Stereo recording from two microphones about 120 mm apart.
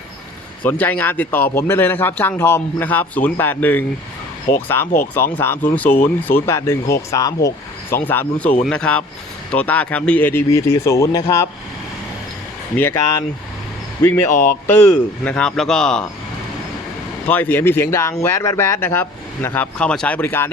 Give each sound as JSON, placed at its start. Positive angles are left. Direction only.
{"t": 0.6, "sound": "a man's voice", "side_deg": 15}
{"t": 10.5, "sound": "speech", "side_deg": 25}
{"t": 12.7, "sound": "a man's voice", "side_deg": 15}
{"t": 14.0, "sound": "speech", "side_deg": 20}
{"t": 15.2, "sound": "a man's voice", "side_deg": 10}
{"t": 17.2, "sound": "a man's voice", "side_deg": 15}